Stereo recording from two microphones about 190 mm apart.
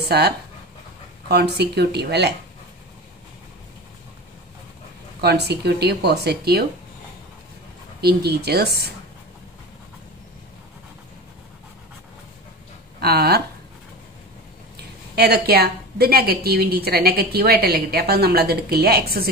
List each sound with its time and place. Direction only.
1.3 s a woman's voice: 60° right (ahead or behind)
5.2 s a woman's voice: 60° right (ahead or behind)
8.0 s a woman's voice: 60° right (ahead or behind)
13.0 s a woman's voice: 55° right (ahead or behind)
15.1 s a woman's voice: 55° right (ahead or behind)